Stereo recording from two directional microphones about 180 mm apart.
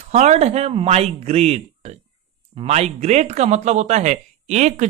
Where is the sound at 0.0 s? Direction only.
40° right (ahead or behind).